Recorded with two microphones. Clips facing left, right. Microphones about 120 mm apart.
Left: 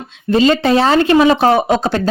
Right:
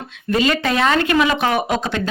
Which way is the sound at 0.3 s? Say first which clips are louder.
Left 6 dB; 30° left (ahead or behind).